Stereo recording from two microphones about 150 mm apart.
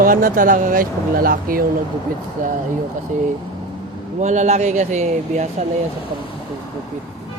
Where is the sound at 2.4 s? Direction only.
60° right (ahead or behind).